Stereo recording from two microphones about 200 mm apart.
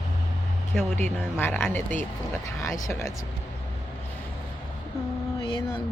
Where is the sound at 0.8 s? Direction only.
10° left (ahead or behind).